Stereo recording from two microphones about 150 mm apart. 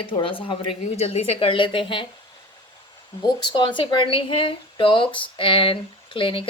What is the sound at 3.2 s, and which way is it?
Speech, 30° left (ahead or behind).